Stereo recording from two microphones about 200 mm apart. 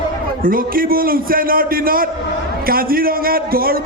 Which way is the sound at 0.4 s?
45° right (ahead or behind).